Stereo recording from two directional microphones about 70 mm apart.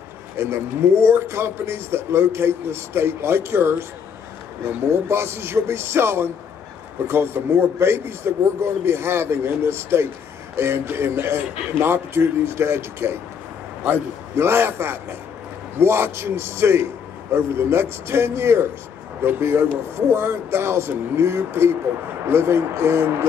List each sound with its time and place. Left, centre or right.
0.4 s a man's voice: right